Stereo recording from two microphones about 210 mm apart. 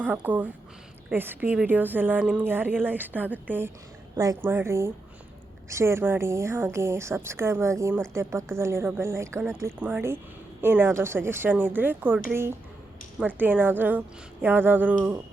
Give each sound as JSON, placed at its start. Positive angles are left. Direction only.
{"t": 0.0, "sound": "a woman's voice", "side_deg": -10}